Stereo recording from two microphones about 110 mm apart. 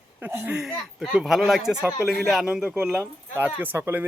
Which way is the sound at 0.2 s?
20° right (ahead or behind).